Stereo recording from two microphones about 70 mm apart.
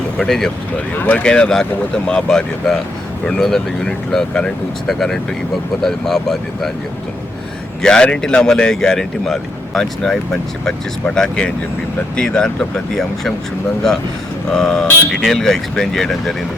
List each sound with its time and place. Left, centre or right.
0.2 s speech: centre
0.9 s speech: left
1.2 s speech: centre
7.8 s speech: centre
14.5 s speech: centre